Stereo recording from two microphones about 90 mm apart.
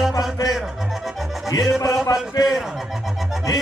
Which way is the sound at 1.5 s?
40° left (ahead or behind).